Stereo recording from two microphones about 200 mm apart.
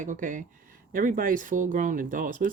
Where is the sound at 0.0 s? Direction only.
40° right (ahead or behind).